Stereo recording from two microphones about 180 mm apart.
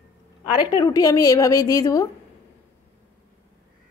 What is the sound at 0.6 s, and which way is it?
A woman's voice, 20° left (ahead or behind).